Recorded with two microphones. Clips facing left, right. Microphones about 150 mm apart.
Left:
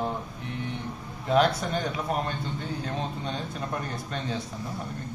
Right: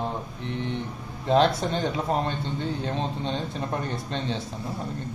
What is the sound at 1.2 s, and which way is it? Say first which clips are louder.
Speech: right 2 dB; 25° right (ahead or behind).